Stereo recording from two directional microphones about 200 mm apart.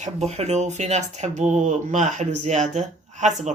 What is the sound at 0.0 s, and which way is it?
Speech, 35° right (ahead or behind).